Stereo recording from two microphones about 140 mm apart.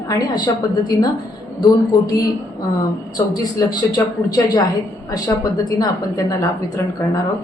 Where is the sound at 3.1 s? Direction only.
25° left (ahead or behind).